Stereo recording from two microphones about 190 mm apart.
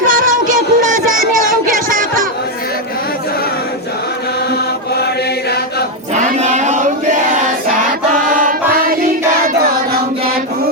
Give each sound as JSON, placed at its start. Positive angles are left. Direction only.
{"t": 0.0, "sound": "music", "side_deg": -45}
{"t": 6.1, "sound": "a sound", "side_deg": -40}
{"t": 8.4, "sound": "choir", "side_deg": -45}